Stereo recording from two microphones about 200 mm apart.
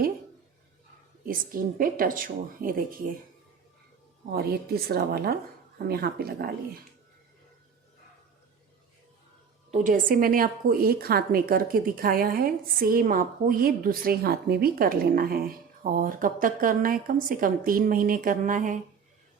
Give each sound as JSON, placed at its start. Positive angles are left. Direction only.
{"t": 1.2, "sound": "a woman's voice", "side_deg": -45}
{"t": 4.3, "sound": "a woman's voice", "side_deg": -50}
{"t": 9.7, "sound": "a woman's voice", "side_deg": -40}